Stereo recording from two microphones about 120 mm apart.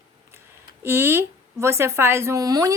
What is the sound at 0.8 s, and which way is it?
A woman's voice, 20° right (ahead or behind).